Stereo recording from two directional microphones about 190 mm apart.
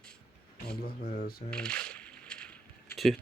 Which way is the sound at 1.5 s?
5° left (ahead or behind).